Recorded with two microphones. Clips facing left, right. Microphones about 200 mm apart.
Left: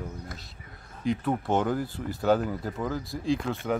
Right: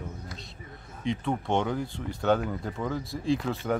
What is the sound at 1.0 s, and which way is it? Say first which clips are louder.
Speech: left 2 dB; 5° left (ahead or behind).